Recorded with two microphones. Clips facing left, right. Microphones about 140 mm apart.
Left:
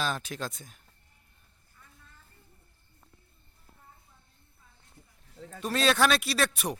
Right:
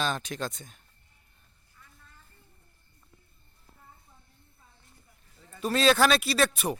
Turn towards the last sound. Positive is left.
turn(degrees=0)  # may be behind; listen again after turning